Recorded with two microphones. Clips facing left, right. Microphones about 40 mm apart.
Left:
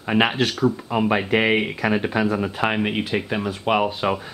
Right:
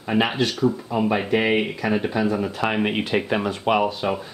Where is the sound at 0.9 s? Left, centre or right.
Left.